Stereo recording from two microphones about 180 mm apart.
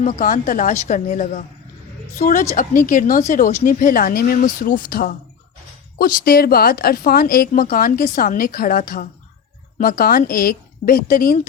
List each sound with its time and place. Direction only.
0.0 s speech: 45° left (ahead or behind)